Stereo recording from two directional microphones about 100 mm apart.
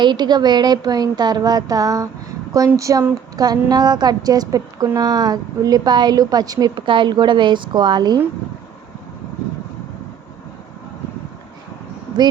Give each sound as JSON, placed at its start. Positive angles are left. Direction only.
{"t": 0.0, "sound": "a woman's voice", "side_deg": -50}
{"t": 6.7, "sound": "a woman's voice", "side_deg": -55}